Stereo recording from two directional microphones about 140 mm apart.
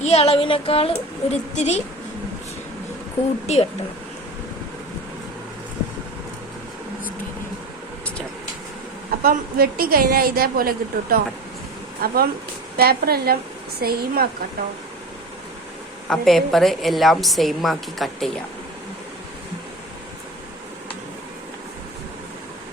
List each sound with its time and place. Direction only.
0.0 s a woman's voice: 50° left (ahead or behind)
3.4 s a woman's voice: 50° left (ahead or behind)
9.2 s a woman's voice: 90° right
16.0 s a woman's voice: centre (ahead or behind)